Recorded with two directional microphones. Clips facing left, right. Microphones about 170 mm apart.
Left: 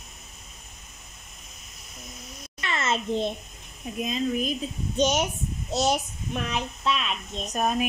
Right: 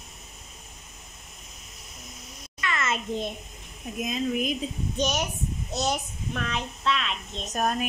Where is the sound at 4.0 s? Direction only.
10° right (ahead or behind).